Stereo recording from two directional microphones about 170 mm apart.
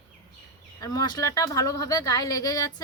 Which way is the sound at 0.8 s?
20° left (ahead or behind).